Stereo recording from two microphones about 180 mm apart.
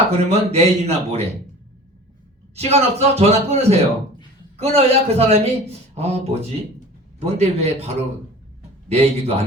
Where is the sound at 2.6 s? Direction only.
35° right (ahead or behind).